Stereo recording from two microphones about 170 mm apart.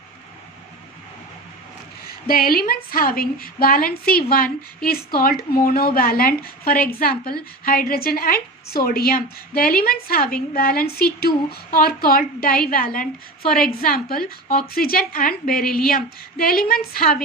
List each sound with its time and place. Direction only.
2.0 s a woman's voice: 60° left (ahead or behind)